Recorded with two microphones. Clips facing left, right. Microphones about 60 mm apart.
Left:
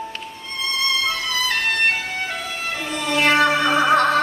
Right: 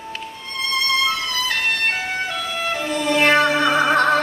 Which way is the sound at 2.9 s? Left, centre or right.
Right.